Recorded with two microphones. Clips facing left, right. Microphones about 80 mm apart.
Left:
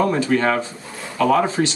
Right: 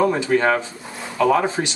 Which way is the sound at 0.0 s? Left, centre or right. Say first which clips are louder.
Even; centre.